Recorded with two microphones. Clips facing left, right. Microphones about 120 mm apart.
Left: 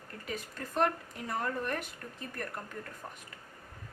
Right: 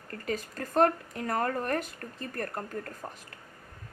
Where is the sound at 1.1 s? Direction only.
55° right (ahead or behind).